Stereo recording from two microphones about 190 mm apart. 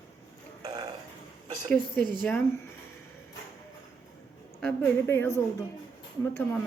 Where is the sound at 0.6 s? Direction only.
20° right (ahead or behind).